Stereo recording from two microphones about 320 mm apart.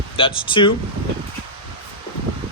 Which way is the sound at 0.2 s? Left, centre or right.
Centre.